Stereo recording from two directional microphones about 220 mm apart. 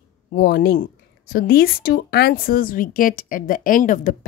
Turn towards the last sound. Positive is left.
turn(degrees=35)  # may be behind; listen again after turning